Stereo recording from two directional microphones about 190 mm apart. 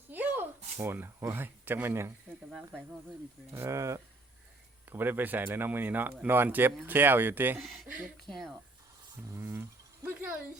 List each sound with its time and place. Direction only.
0.1 s a sound: 10° right (ahead or behind)
0.8 s speech: 10° right (ahead or behind)
2.5 s speech: centre (ahead or behind)
3.5 s speech: 15° right (ahead or behind)
7.6 s speech: centre (ahead or behind)
9.3 s speech: 15° right (ahead or behind)